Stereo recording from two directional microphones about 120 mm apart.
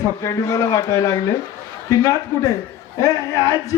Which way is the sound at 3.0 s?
25° left (ahead or behind).